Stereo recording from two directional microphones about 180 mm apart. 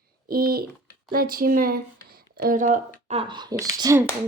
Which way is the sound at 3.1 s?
30° right (ahead or behind).